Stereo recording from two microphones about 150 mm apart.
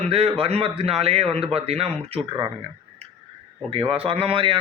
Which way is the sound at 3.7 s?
40° right (ahead or behind).